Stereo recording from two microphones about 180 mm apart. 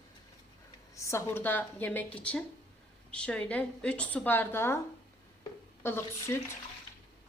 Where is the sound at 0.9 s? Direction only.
15° left (ahead or behind).